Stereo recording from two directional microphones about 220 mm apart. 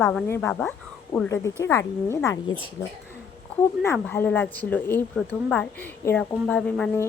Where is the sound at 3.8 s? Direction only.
10° left (ahead or behind).